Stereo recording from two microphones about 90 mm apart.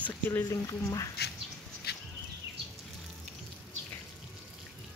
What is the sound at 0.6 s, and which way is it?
Speech, 40° left (ahead or behind).